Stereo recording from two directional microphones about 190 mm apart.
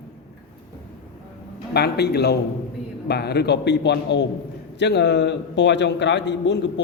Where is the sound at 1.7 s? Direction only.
60° left (ahead or behind).